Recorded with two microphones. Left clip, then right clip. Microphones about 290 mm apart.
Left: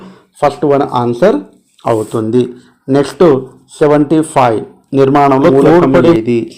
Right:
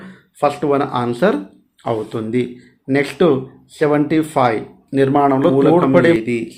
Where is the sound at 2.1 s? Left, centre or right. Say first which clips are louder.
Left 8 dB; centre.